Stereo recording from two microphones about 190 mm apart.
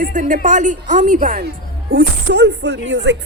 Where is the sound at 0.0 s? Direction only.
45° right (ahead or behind).